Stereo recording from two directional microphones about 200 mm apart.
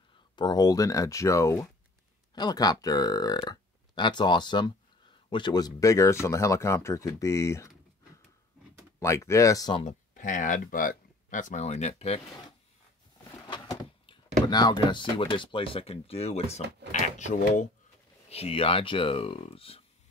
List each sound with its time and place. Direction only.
0.4 s speech: 20° left (ahead or behind)
9.0 s speech: 15° left (ahead or behind)
9.8 s speech: 40° left (ahead or behind)
13.5 s speech: 20° left (ahead or behind)